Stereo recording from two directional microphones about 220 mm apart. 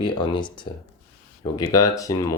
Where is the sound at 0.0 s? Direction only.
20° left (ahead or behind).